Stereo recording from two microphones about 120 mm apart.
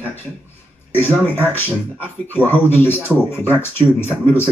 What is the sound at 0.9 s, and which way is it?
Speech, 20° left (ahead or behind).